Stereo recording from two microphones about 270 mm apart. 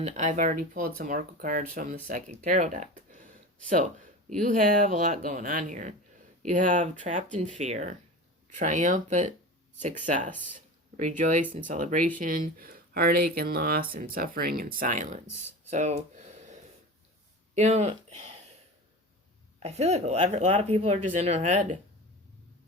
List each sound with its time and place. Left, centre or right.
0.0 s speech: right
15.7 s a sound: right
17.5 s speech: right
19.5 s speech: right